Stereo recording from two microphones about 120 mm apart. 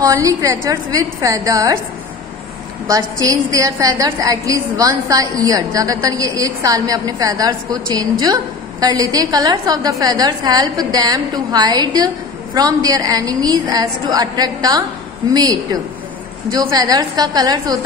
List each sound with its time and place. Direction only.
0.0 s a woman's voice: 25° right (ahead or behind)
2.9 s a woman's voice: 30° right (ahead or behind)